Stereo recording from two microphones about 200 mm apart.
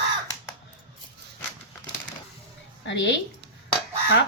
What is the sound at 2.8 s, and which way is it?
Speech, 65° left (ahead or behind).